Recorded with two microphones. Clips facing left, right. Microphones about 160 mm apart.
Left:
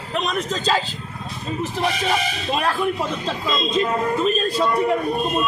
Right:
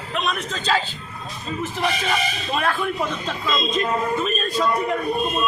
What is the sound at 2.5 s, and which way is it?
Speech, 35° left (ahead or behind).